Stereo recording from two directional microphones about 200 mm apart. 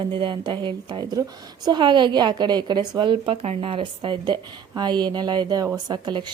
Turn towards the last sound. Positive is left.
turn(degrees=-20)  # may be behind; listen again after turning